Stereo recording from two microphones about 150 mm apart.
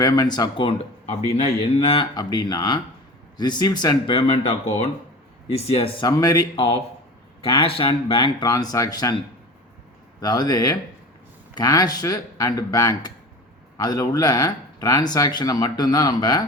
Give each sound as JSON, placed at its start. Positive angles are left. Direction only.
{"t": 0.0, "sound": "speech", "side_deg": 25}
{"t": 6.1, "sound": "speech", "side_deg": 25}